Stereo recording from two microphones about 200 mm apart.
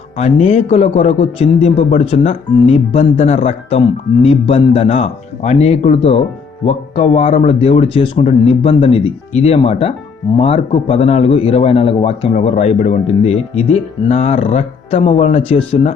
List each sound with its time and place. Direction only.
0.2 s a man's voice: 30° left (ahead or behind)